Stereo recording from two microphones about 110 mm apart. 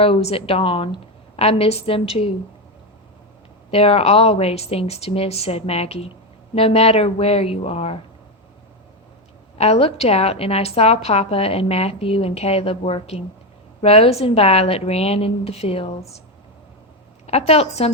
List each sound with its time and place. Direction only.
0.0 s a woman's voice: 65° left (ahead or behind)
1.4 s a woman's voice: 65° left (ahead or behind)
3.7 s a woman's voice: 60° left (ahead or behind)
9.6 s a woman's voice: 70° left (ahead or behind)
17.2 s a woman's voice: 70° left (ahead or behind)